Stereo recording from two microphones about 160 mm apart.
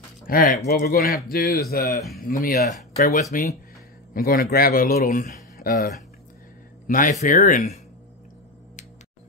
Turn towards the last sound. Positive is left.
turn(degrees=45)  # may be behind; listen again after turning